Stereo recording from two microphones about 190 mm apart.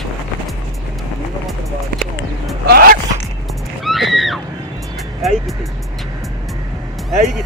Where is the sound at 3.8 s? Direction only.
Centre (ahead or behind).